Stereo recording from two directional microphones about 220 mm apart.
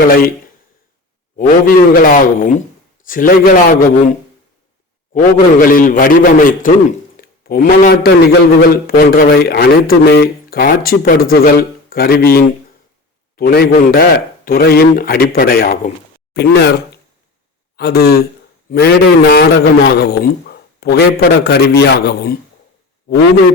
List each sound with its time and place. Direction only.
1.4 s a man's voice: 40° left (ahead or behind)
5.1 s a man's voice: 40° left (ahead or behind)